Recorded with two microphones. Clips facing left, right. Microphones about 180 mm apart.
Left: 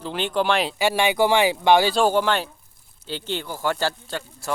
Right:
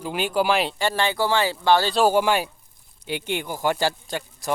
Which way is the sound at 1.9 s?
10° right (ahead or behind).